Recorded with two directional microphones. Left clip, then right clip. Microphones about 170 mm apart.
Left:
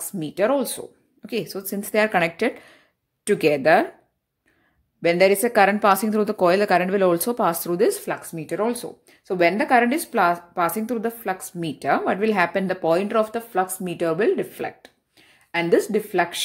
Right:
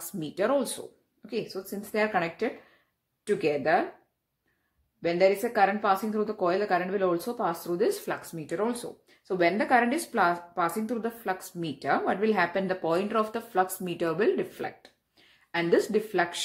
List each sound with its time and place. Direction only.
0.1 s a woman's voice: 35° left (ahead or behind)
5.0 s a woman's voice: 50° left (ahead or behind)
7.9 s speech: 35° left (ahead or behind)